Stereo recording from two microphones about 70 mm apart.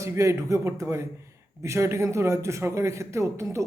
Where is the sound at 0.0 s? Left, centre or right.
Right.